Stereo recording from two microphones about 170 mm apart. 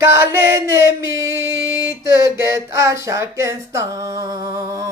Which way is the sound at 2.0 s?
20° right (ahead or behind).